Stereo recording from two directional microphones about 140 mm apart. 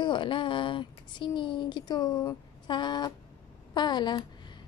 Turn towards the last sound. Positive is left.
turn(degrees=30)  # may be behind; listen again after turning